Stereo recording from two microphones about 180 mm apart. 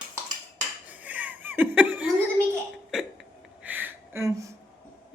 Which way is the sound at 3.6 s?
10° right (ahead or behind).